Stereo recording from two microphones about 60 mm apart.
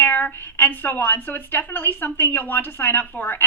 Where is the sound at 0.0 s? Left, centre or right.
Left.